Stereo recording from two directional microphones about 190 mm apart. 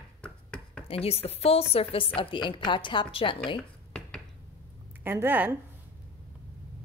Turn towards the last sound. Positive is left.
turn(degrees=-10)  # may be behind; listen again after turning